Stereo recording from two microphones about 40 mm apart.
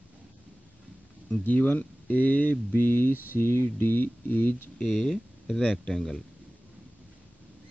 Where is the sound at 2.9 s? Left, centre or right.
Left.